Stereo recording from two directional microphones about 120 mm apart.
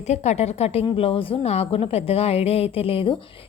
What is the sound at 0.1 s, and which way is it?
A woman's voice, 70° left (ahead or behind).